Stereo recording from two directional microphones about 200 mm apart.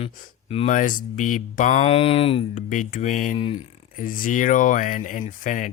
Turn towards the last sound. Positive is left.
turn(degrees=40)  # may be behind; listen again after turning